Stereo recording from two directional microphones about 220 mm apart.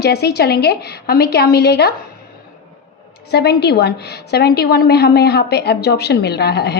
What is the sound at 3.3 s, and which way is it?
A woman's voice, 50° left (ahead or behind).